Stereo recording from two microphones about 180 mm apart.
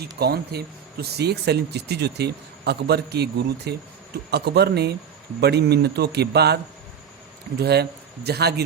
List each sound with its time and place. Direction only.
0.2 s speech: 60° right (ahead or behind)
7.6 s speech: 65° right (ahead or behind)